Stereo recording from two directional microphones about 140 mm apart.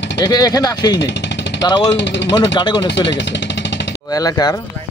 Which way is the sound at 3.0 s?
30° left (ahead or behind).